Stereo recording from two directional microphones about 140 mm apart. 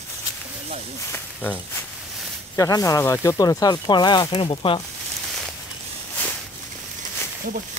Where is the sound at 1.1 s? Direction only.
10° left (ahead or behind).